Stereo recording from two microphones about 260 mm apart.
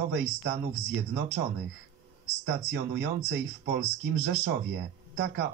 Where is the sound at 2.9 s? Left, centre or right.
Right.